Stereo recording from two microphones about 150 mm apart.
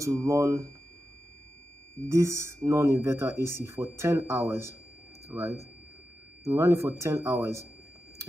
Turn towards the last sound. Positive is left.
turn(degrees=-20)  # may be behind; listen again after turning